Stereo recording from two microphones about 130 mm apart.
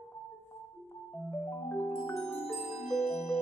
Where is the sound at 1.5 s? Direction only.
10° left (ahead or behind).